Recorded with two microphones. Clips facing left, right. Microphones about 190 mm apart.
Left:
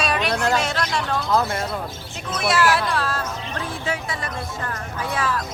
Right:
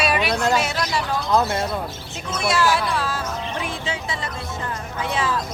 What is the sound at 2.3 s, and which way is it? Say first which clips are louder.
Speech: left 1 dB; centre (ahead or behind).